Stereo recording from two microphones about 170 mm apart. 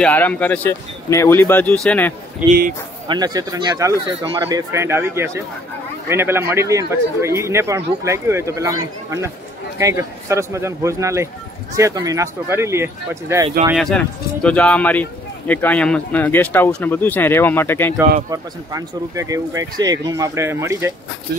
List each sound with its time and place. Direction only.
0.0 s speech: 10° left (ahead or behind)
3.1 s speech: 25° right (ahead or behind)
13.7 s speech: 5° left (ahead or behind)
18.3 s speech: 20° right (ahead or behind)